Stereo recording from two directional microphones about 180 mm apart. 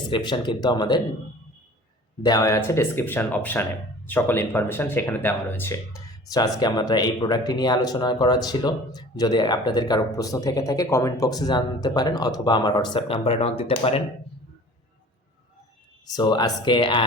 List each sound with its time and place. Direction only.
0.1 s speech: 25° left (ahead or behind)
2.2 s speech: 20° left (ahead or behind)
16.0 s speech: 20° left (ahead or behind)